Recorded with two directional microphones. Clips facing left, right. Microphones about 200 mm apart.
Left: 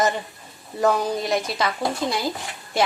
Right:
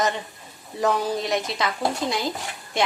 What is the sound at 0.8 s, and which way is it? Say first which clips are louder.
Speech: left 2 dB; centre (ahead or behind).